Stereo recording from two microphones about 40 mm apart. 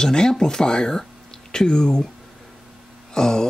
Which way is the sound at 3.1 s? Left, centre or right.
Centre.